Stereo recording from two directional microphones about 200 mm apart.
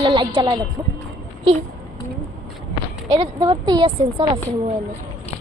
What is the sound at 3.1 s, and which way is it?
A woman's voice, 20° right (ahead or behind).